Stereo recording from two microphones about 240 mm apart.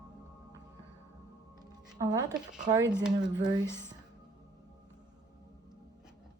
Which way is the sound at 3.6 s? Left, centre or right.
Centre.